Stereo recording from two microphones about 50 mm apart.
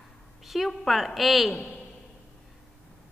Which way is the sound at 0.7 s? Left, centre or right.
Centre.